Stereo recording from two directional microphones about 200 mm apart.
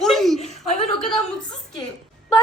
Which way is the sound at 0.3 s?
30° left (ahead or behind).